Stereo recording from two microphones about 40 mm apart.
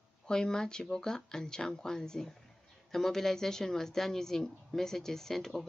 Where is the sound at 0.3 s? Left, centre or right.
Centre.